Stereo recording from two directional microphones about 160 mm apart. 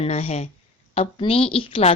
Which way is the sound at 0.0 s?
40° left (ahead or behind).